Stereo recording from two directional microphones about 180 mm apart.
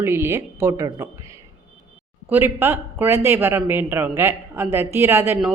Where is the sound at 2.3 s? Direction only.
10° right (ahead or behind).